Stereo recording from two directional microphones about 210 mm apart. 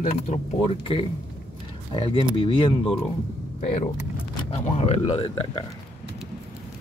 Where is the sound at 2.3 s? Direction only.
25° left (ahead or behind).